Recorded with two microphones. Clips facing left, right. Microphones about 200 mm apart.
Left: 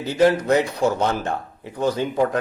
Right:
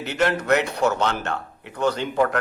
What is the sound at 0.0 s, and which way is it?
A man's voice, 70° right (ahead or behind).